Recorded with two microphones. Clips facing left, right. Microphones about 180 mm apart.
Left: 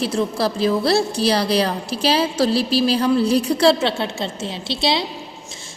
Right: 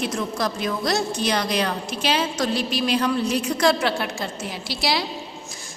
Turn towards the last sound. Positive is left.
turn(degrees=25)  # may be behind; listen again after turning